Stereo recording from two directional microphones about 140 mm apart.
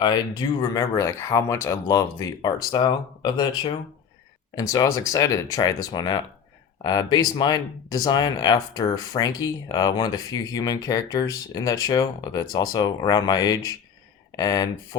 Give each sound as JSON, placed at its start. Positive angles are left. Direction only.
{"t": 0.0, "sound": "speech", "side_deg": 30}